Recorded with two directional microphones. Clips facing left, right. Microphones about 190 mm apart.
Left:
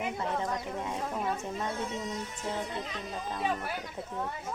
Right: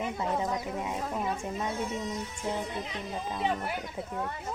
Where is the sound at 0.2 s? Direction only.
10° right (ahead or behind).